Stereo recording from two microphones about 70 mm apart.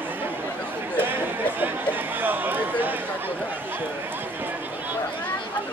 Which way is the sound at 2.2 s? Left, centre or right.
Right.